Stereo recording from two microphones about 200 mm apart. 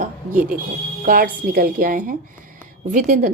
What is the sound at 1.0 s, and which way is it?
A woman's voice, 45° right (ahead or behind).